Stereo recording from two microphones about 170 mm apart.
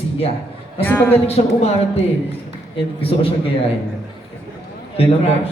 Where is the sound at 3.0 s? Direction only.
35° left (ahead or behind).